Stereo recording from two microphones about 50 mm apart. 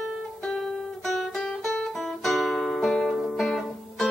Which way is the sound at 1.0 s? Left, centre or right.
Centre.